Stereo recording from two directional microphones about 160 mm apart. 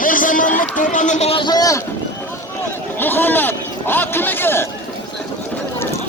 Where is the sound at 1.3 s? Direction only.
30° left (ahead or behind).